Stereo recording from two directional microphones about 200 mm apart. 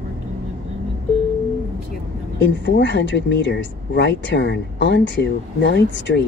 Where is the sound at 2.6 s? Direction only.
60° left (ahead or behind).